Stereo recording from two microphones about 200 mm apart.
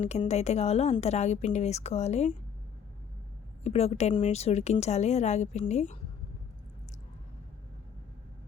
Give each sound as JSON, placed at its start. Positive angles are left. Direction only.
{"t": 0.0, "sound": "speech", "side_deg": 35}
{"t": 3.6, "sound": "speech", "side_deg": 30}